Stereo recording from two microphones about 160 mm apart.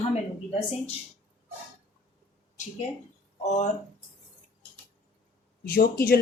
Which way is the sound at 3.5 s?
45° left (ahead or behind).